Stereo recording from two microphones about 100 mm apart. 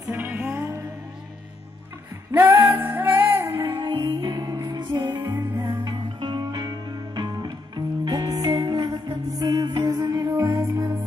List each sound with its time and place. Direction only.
0.1 s music: 20° right (ahead or behind)
2.3 s music: 20° right (ahead or behind)
3.6 s music: 50° right (ahead or behind)
5.2 s music: 20° right (ahead or behind)
5.9 s music: 45° right (ahead or behind); by 11.0 s 30° right (ahead or behind)